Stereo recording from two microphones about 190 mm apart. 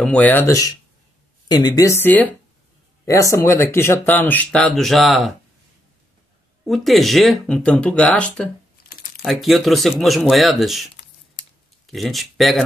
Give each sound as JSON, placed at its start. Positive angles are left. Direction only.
{"t": 0.0, "sound": "speech", "side_deg": 5}
{"t": 6.7, "sound": "speech", "side_deg": 0}